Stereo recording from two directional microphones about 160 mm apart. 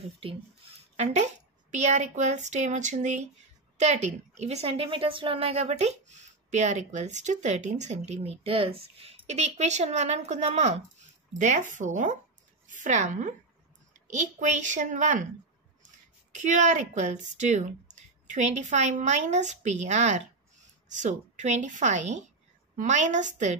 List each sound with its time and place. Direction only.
0.9 s a woman's voice: 45° right (ahead or behind)
16.3 s a woman's voice: 50° right (ahead or behind)